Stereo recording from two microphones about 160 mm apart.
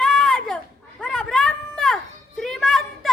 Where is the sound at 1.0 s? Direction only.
5° left (ahead or behind).